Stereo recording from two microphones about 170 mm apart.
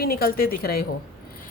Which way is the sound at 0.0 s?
60° left (ahead or behind).